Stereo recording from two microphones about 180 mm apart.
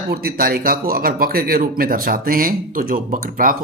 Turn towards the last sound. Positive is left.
turn(degrees=-50)  # may be behind; listen again after turning